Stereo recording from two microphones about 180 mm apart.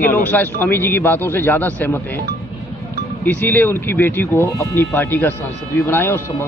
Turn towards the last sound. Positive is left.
turn(degrees=15)  # may be behind; listen again after turning